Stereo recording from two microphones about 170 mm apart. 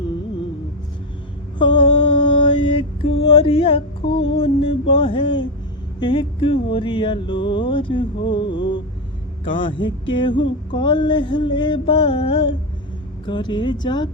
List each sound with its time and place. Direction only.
1.5 s mantra: 30° left (ahead or behind)
4.2 s music: 35° left (ahead or behind)
6.0 s a sound: 30° left (ahead or behind)